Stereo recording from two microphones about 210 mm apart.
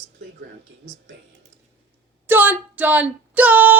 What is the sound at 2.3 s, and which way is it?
Speech, 10° right (ahead or behind).